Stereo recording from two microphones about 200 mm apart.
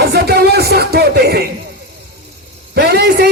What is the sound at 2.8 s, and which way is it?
Speech, 55° right (ahead or behind).